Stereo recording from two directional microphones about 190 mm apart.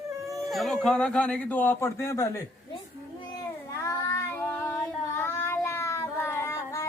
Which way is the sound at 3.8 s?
10° left (ahead or behind).